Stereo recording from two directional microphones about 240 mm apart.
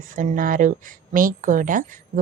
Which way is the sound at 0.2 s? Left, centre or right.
Right.